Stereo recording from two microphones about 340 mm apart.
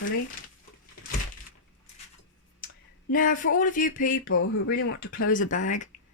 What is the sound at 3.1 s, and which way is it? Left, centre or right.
Speech, left.